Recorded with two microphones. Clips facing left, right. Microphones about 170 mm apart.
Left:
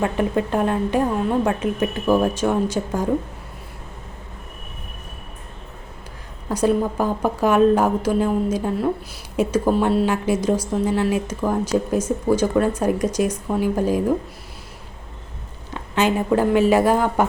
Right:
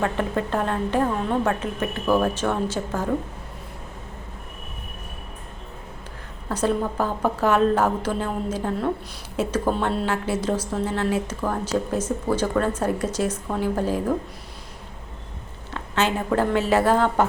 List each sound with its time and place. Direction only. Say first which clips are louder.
0.0 s speech: left 3 dB; 15° left (ahead or behind)
6.5 s speech: left 4 dB; 10° left (ahead or behind)
15.7 s speech: left 4 dB; 15° left (ahead or behind)